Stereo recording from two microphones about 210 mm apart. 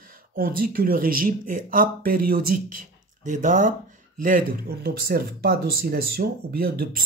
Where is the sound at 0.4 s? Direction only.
45° right (ahead or behind).